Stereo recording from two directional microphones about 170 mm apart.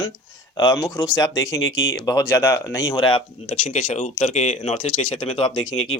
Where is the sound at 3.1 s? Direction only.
35° left (ahead or behind).